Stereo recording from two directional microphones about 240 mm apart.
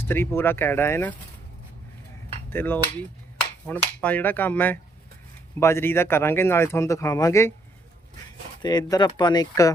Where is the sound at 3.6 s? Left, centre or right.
Centre.